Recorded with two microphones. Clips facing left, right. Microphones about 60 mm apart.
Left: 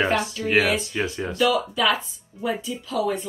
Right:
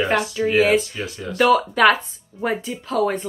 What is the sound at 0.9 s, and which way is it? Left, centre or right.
Speech, left.